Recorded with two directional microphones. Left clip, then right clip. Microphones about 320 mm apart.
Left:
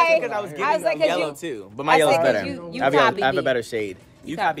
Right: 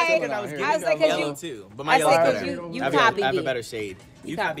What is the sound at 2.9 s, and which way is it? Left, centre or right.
Speech, centre.